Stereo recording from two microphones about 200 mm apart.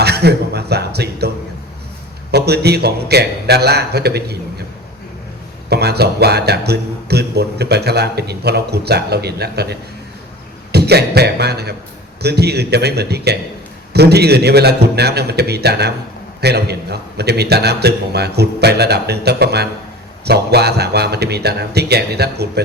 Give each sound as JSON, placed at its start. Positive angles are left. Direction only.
{"t": 0.0, "sound": "speech", "side_deg": -55}
{"t": 2.3, "sound": "a man's voice", "side_deg": -55}
{"t": 5.6, "sound": "a man's voice", "side_deg": -55}